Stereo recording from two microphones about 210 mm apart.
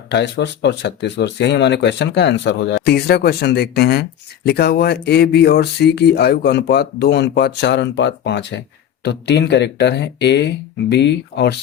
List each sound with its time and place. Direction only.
0.1 s speech: 55° left (ahead or behind)